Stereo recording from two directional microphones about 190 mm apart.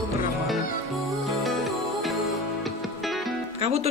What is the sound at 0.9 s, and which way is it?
Music, centre (ahead or behind).